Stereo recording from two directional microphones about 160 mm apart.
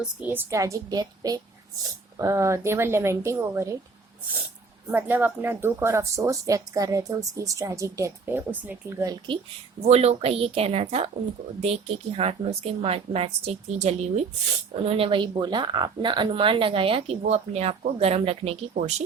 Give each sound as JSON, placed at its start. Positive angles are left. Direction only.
{"t": 0.0, "sound": "speech", "side_deg": -10}
{"t": 4.9, "sound": "speech", "side_deg": -10}
{"t": 9.0, "sound": "speech", "side_deg": -30}
{"t": 9.8, "sound": "speech", "side_deg": -40}